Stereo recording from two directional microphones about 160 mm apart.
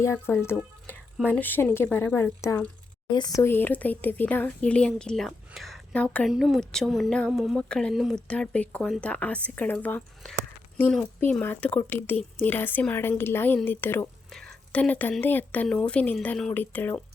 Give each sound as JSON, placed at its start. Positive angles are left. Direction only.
{"t": 0.0, "sound": "a woman's voice", "side_deg": 15}
{"t": 3.4, "sound": "a woman's voice", "side_deg": 10}